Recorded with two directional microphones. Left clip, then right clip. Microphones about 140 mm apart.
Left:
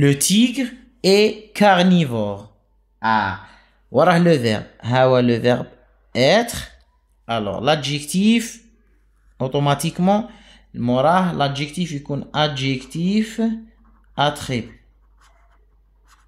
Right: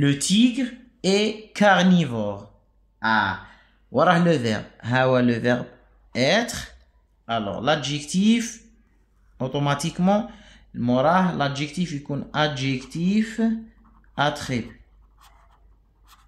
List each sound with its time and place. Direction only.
0.0 s speech: 55° left (ahead or behind); by 2.4 s 35° left (ahead or behind)
3.0 s speech: 50° left (ahead or behind)
3.9 s speech: 40° left (ahead or behind)
7.2 s speech: 40° left (ahead or behind); by 13.6 s 25° left (ahead or behind)
15.1 s a sound: centre (ahead or behind)